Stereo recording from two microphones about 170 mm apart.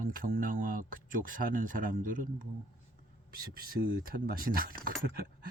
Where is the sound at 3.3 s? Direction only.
60° right (ahead or behind).